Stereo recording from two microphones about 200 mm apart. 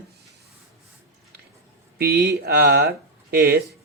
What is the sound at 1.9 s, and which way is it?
Speech, 50° right (ahead or behind).